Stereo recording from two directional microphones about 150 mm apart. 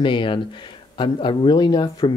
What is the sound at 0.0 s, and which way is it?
Speech, 35° left (ahead or behind).